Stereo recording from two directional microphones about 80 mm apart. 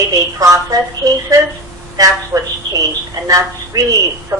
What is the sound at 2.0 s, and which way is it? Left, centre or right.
A woman's voice, right.